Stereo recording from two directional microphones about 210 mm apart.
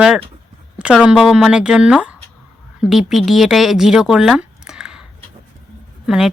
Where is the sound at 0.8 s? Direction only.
5° right (ahead or behind).